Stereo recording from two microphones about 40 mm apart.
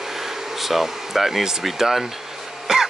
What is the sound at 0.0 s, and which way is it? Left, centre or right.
Speech, centre.